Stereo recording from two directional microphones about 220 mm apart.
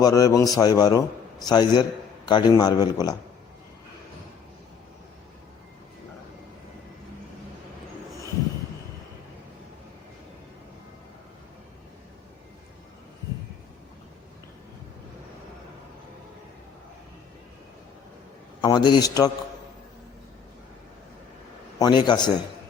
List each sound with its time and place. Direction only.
0.0 s a man's voice: 15° left (ahead or behind)
18.6 s a man's voice: 20° left (ahead or behind)
21.8 s a man's voice: 20° left (ahead or behind)